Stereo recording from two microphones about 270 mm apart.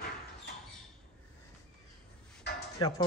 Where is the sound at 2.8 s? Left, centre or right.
Centre.